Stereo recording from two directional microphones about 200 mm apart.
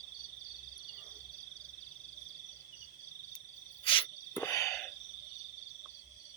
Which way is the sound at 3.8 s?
25° left (ahead or behind).